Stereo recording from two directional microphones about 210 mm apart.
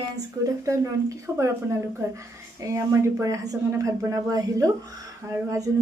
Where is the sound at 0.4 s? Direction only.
15° right (ahead or behind).